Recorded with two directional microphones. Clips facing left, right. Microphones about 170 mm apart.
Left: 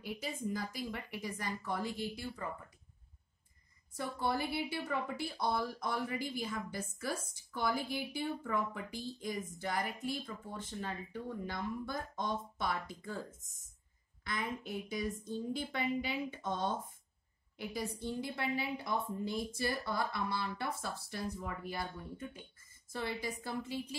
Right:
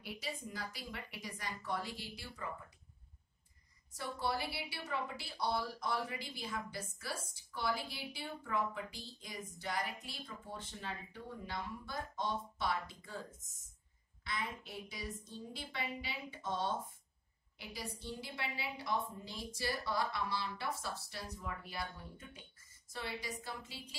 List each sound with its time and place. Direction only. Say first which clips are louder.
0.0 s a woman's voice: left 5 dB; 45° left (ahead or behind)
3.9 s a woman's voice: left 3 dB; 50° left (ahead or behind)
14.2 s a woman's voice: left 4 dB; 50° left (ahead or behind)